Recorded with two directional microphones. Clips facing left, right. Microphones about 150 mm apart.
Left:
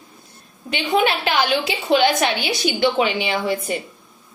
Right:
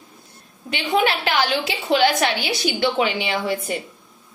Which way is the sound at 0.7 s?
20° left (ahead or behind).